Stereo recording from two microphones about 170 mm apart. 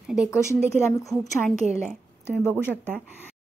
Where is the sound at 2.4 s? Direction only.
10° left (ahead or behind).